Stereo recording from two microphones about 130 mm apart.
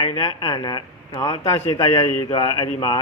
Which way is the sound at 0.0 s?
35° left (ahead or behind).